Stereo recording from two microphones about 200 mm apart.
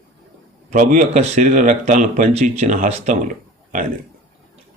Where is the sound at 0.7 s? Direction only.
40° right (ahead or behind).